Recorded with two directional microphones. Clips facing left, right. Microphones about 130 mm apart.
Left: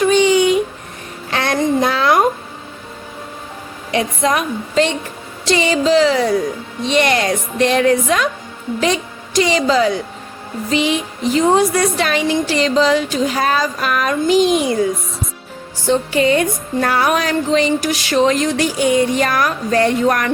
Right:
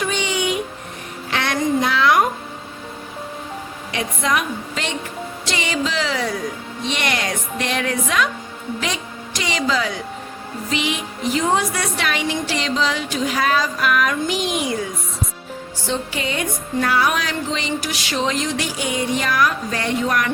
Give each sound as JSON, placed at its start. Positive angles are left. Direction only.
{"t": 0.0, "sound": "a sound", "side_deg": 40}
{"t": 3.9, "sound": "a woman's voice", "side_deg": 35}
{"t": 15.9, "sound": "music", "side_deg": 50}